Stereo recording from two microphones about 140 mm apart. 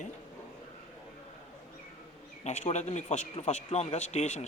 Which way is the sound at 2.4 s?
55° left (ahead or behind).